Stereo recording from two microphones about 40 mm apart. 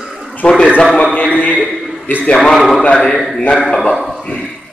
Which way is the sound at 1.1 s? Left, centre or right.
Left.